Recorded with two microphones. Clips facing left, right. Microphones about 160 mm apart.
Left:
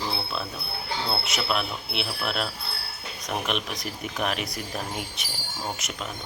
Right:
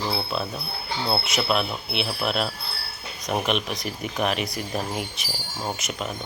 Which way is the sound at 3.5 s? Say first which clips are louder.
Right 4 dB; centre (ahead or behind).